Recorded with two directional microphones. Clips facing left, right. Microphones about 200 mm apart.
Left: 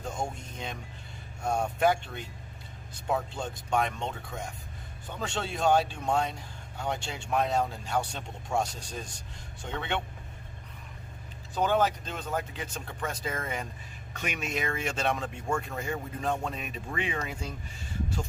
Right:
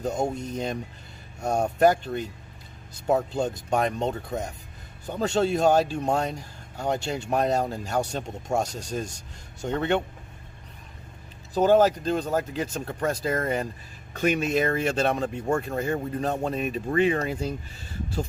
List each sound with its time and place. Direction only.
0.0 s speech: 40° right (ahead or behind)
11.5 s speech: 40° right (ahead or behind)